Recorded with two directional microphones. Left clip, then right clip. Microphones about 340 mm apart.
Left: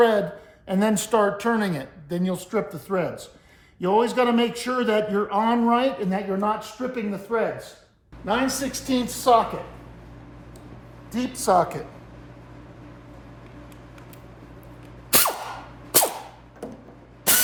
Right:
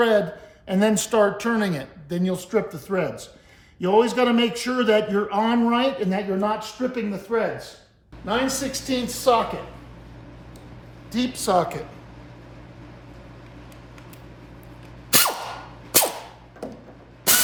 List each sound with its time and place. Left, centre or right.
0.0 s a sound: centre
0.7 s a man's voice: centre
8.7 s a woman's voice: centre
11.1 s a woman's voice: centre
15.1 s a sound: centre
17.3 s spray: centre